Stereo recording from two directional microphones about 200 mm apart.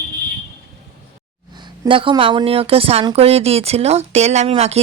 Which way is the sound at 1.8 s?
25° right (ahead or behind).